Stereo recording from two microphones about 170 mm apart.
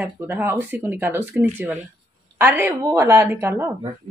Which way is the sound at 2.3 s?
10° right (ahead or behind).